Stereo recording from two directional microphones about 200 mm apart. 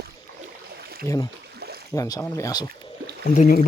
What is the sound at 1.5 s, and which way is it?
Boat, 50° right (ahead or behind).